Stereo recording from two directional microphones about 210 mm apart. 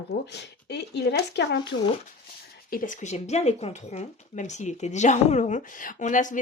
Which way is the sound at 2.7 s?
40° left (ahead or behind).